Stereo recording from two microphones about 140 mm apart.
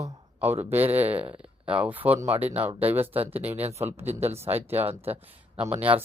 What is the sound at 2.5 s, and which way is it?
Speech, 50° right (ahead or behind).